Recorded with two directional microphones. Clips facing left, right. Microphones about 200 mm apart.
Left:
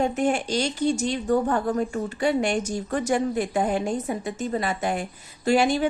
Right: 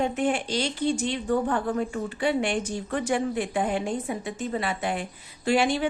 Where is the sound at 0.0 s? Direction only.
40° left (ahead or behind).